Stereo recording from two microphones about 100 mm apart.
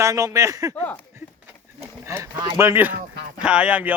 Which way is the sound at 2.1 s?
30° right (ahead or behind).